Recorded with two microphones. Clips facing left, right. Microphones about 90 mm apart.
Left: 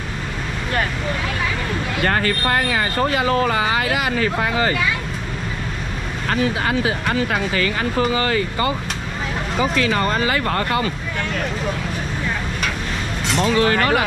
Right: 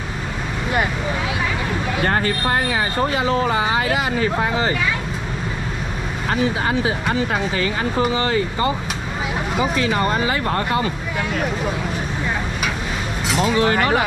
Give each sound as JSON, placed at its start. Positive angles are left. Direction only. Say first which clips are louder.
{"t": 2.2, "sound": "speech", "louder": "even", "side_deg": 75}
{"t": 9.8, "sound": "speech", "louder": "even", "side_deg": -10}
{"t": 13.3, "sound": "speech", "louder": "even", "side_deg": -5}